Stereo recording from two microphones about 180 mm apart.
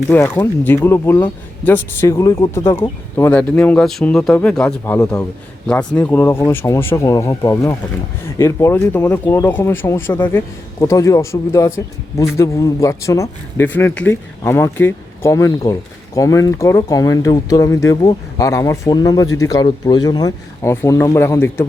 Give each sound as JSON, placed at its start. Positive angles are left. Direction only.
{"t": 0.1, "sound": "speech", "side_deg": 10}